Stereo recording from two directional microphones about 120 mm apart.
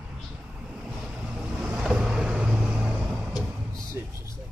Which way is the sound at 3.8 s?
25° right (ahead or behind).